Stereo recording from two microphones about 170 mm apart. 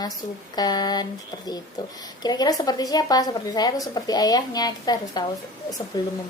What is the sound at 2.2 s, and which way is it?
A woman's voice, 25° left (ahead or behind).